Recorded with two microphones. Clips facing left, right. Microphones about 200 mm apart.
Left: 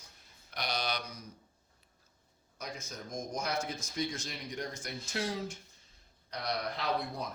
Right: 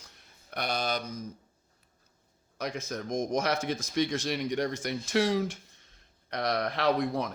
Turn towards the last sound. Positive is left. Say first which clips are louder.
# right 8 dB
turn(degrees=-90)